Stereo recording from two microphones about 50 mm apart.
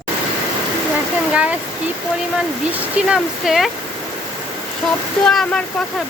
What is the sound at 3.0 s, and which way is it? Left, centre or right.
Speech, centre.